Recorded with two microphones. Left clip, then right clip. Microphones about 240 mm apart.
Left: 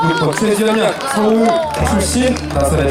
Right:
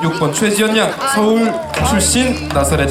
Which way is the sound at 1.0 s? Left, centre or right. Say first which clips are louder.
Even; right.